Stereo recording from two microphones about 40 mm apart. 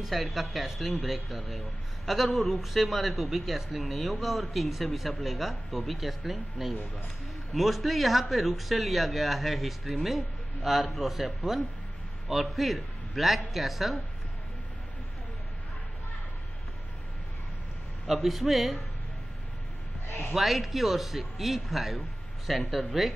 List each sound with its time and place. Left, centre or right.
0.1 s a man's voice: centre
18.0 s speech: centre
20.3 s speech: centre